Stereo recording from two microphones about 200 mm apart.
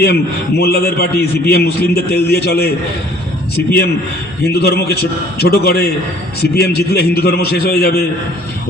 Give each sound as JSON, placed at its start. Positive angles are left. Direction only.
{"t": 0.0, "sound": "a man's voice", "side_deg": 55}
{"t": 4.5, "sound": "a man's voice", "side_deg": 50}